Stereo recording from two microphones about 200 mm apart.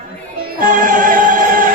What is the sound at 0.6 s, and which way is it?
Music, 40° right (ahead or behind).